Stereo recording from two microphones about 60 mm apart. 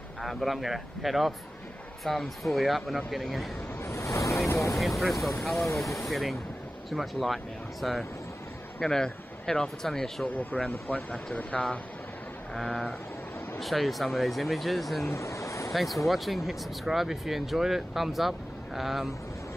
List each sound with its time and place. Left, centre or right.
0.2 s speech: centre
3.8 s vehicle: left
4.7 s speech: centre
8.8 s speech: centre
10.2 s speech: left
11.5 s speech: centre
15.0 s vehicle: left
15.7 s speech: centre